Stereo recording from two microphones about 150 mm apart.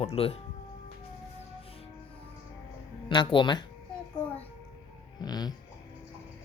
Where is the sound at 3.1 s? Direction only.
30° left (ahead or behind).